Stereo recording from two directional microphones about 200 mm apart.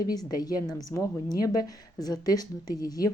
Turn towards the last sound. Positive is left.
turn(degrees=20)  # may be behind; listen again after turning